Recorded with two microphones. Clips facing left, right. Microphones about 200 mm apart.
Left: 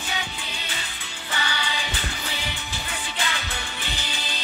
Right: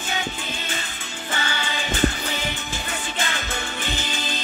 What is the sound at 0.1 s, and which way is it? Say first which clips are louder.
Music: right 5 dB; 45° right (ahead or behind).